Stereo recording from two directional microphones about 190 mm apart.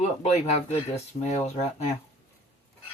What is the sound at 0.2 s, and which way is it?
Speech, 35° left (ahead or behind).